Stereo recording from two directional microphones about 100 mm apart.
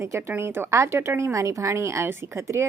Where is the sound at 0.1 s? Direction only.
25° right (ahead or behind).